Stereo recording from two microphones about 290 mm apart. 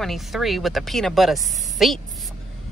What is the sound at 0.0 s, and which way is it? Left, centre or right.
Speech, centre.